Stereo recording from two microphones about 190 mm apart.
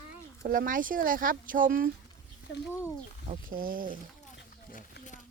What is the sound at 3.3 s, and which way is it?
Speech, 50° right (ahead or behind).